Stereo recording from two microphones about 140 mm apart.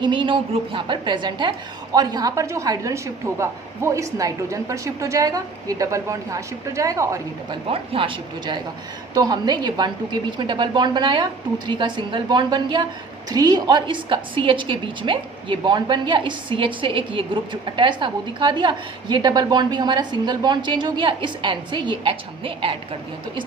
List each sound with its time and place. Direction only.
0.0 s a woman's voice: 35° right (ahead or behind)
7.7 s a woman's voice: 40° right (ahead or behind)